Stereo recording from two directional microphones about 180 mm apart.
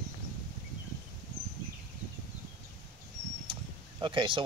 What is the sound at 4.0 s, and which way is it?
Speech, 25° right (ahead or behind).